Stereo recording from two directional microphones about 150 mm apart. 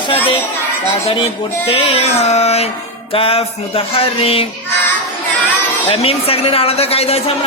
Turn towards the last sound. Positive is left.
turn(degrees=40)  # may be behind; listen again after turning